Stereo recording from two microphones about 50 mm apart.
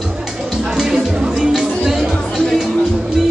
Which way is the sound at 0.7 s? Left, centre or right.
Centre.